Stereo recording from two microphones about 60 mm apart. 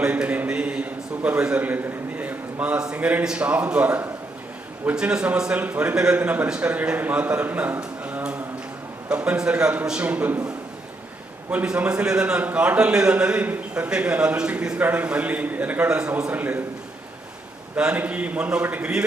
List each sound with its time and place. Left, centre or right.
0.0 s a man's voice: centre
9.0 s a man's voice: centre
11.5 s a man's voice: centre
14.8 s a man's voice: right
17.7 s a man's voice: right